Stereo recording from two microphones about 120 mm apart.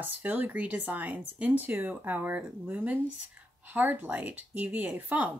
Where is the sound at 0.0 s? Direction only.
15° right (ahead or behind).